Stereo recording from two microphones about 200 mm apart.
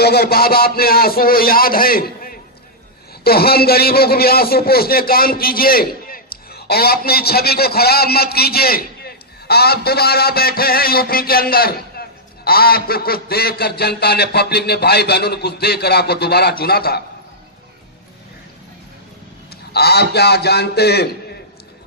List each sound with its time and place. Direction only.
0.0 s a man's voice: 50° left (ahead or behind)
19.5 s a man's voice: 50° left (ahead or behind)